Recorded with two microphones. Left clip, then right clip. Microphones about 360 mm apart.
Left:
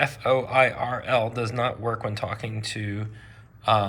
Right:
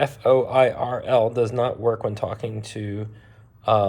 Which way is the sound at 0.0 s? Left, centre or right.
Centre.